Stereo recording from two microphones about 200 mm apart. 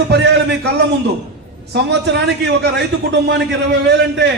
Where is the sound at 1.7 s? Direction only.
60° right (ahead or behind).